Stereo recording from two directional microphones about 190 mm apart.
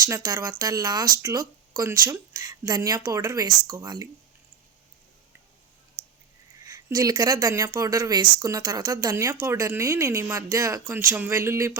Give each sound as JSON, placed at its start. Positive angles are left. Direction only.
{"t": 0.0, "sound": "speech", "side_deg": -20}
{"t": 6.7, "sound": "speech", "side_deg": -20}